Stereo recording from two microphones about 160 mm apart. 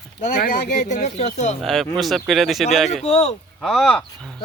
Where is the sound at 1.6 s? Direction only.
Centre (ahead or behind).